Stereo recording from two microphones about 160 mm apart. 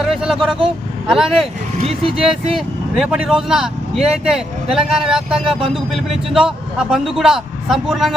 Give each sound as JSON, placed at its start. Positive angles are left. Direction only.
{"t": 0.0, "sound": "speech", "side_deg": 0}
{"t": 1.8, "sound": "speech", "side_deg": -40}
{"t": 2.1, "sound": "speech", "side_deg": -5}